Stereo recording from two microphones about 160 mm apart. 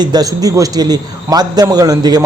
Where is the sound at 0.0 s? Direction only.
25° right (ahead or behind).